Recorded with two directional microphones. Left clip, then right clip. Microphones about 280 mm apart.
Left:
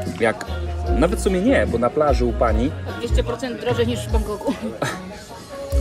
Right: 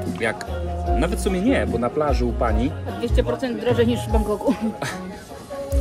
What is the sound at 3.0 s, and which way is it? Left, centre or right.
Speech, right.